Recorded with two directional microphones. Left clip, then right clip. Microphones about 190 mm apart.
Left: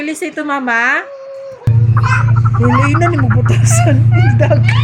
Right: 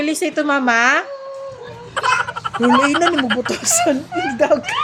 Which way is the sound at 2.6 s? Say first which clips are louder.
Even; 15° right (ahead or behind).